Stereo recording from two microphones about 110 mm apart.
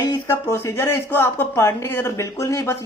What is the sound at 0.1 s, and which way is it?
Speech, 25° left (ahead or behind).